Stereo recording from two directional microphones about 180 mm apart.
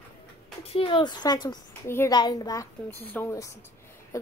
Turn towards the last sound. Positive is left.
turn(degrees=20)  # may be behind; listen again after turning